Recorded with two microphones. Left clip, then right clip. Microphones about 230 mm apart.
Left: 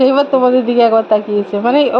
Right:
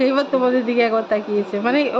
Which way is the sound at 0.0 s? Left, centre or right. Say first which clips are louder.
Left 7 dB; centre.